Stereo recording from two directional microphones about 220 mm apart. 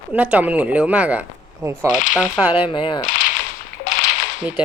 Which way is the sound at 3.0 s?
35° left (ahead or behind).